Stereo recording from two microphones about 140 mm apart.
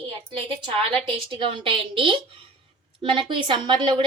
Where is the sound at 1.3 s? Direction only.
40° right (ahead or behind).